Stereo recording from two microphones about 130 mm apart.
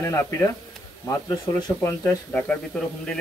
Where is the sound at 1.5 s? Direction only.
20° left (ahead or behind).